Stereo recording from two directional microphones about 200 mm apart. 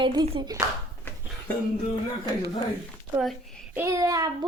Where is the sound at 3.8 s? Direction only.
15° right (ahead or behind).